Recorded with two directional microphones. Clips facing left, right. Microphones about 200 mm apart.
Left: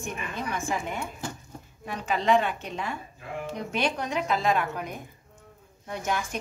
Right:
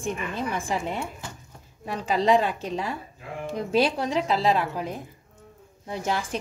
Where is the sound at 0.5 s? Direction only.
30° right (ahead or behind).